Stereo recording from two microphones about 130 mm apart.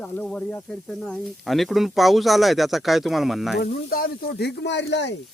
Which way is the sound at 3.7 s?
90° left.